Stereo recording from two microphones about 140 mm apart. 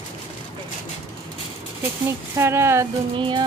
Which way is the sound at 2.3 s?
20° right (ahead or behind).